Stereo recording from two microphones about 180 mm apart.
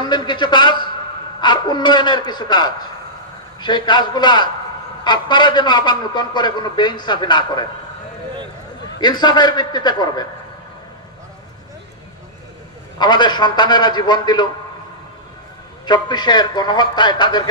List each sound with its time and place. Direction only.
0.0 s a man's voice: 25° left (ahead or behind)
9.0 s a man's voice: 25° left (ahead or behind)
13.0 s a man's voice: 25° left (ahead or behind)
15.8 s a man's voice: 25° left (ahead or behind)